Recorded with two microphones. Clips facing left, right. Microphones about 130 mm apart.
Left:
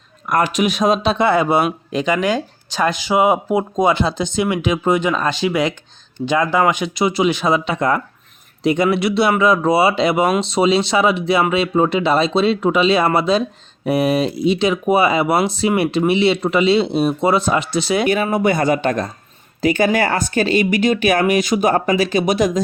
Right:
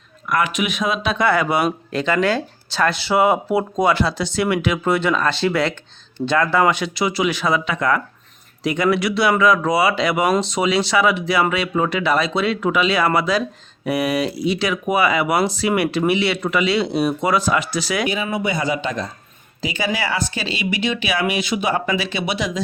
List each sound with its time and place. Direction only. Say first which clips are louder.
0.3 s speech: left 4 dB; 40° left (ahead or behind)
1.1 s speech: left 3 dB; 25° left (ahead or behind)
18.0 s speech: left 6 dB; 55° left (ahead or behind)